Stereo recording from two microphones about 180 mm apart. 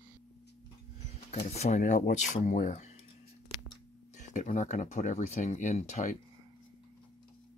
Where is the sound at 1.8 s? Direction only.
50° left (ahead or behind).